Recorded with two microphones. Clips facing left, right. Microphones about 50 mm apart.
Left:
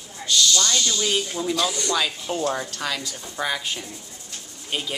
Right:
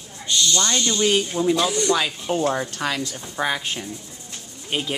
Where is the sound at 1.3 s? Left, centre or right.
Centre.